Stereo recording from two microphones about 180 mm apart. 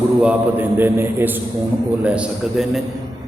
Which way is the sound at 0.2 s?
10° right (ahead or behind).